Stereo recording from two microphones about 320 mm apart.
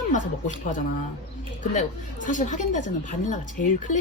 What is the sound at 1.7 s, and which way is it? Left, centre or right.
Speech, left.